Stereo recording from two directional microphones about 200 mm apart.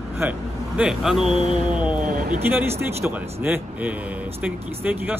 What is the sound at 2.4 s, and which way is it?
Speech, 10° right (ahead or behind).